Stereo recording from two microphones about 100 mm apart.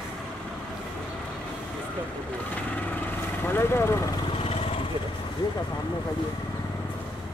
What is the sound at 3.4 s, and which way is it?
Speech, 25° left (ahead or behind).